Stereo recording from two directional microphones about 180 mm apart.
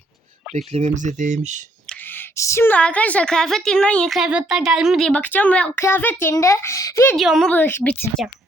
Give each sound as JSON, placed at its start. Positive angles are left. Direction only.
{"t": 0.5, "sound": "speech", "side_deg": -40}
{"t": 1.9, "sound": "a woman's voice", "side_deg": 10}
{"t": 7.2, "sound": "a woman's voice", "side_deg": 0}